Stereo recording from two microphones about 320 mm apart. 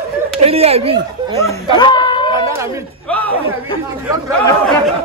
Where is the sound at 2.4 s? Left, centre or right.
Centre.